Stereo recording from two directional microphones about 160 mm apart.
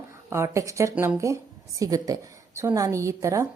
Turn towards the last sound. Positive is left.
turn(degrees=-20)  # may be behind; listen again after turning